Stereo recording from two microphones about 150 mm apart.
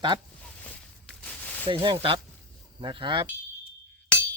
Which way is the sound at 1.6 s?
35° right (ahead or behind).